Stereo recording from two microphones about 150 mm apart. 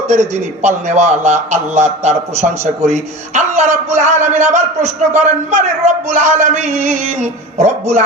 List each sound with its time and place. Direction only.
0.1 s a man's voice: 50° right (ahead or behind)